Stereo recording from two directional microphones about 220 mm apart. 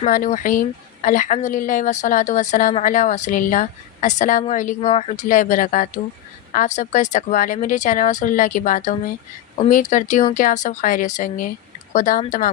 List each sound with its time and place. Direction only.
0.0 s a woman's voice: 35° left (ahead or behind)